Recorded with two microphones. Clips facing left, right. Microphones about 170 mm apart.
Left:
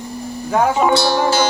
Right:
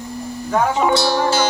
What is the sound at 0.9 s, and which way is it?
Music, 65° left (ahead or behind).